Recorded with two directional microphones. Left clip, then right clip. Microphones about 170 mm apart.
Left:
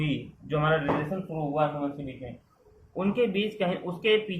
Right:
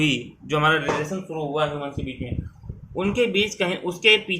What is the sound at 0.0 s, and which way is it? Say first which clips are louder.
Speech: right 10 dB; 70° right (ahead or behind).